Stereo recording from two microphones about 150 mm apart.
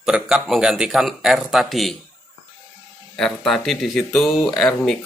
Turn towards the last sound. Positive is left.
turn(degrees=5)  # may be behind; listen again after turning